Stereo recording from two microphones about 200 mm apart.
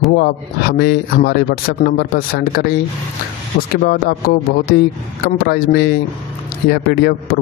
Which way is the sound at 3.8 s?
50° left (ahead or behind).